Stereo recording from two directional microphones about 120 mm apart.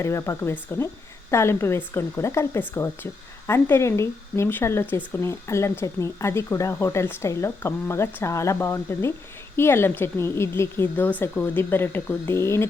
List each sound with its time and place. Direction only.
0.0 s speech: 25° left (ahead or behind)